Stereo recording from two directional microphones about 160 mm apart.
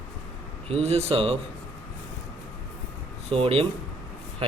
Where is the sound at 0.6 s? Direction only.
40° right (ahead or behind).